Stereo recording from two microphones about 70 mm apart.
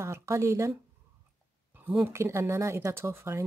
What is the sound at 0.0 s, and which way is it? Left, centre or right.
Speech, right.